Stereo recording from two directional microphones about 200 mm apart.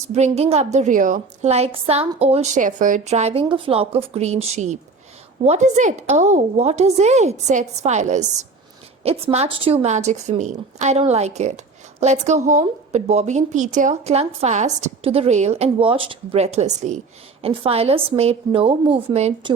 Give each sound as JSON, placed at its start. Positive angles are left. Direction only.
{"t": 0.1, "sound": "a woman's voice", "side_deg": -30}